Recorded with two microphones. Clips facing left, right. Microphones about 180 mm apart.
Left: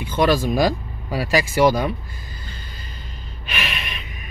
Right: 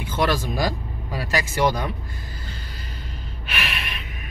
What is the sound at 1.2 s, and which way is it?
Speech, 90° left.